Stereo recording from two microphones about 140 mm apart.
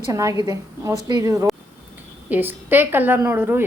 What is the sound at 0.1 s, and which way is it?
A woman's voice, 25° right (ahead or behind).